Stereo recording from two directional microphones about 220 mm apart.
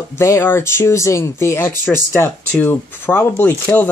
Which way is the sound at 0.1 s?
10° left (ahead or behind).